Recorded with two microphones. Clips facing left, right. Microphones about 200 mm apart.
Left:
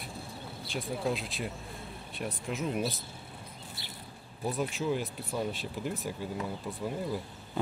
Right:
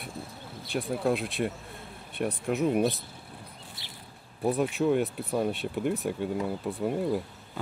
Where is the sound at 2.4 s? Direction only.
60° right (ahead or behind).